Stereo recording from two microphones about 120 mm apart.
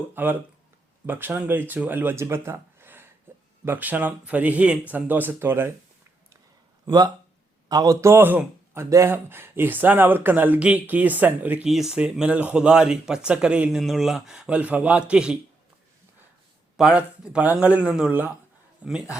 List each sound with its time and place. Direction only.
0.1 s speech: 15° right (ahead or behind)
3.3 s a sound: 15° right (ahead or behind)
3.7 s speech: 15° right (ahead or behind)
6.8 s speech: 35° right (ahead or behind); by 15.4 s 10° right (ahead or behind)
16.7 s speech: 5° right (ahead or behind)